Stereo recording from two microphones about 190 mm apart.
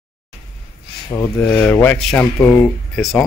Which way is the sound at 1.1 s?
10° left (ahead or behind).